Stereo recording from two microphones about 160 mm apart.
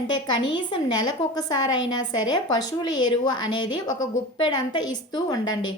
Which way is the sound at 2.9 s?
25° left (ahead or behind).